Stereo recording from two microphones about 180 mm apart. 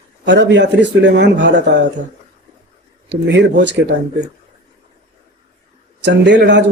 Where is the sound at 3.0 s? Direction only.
75° right (ahead or behind).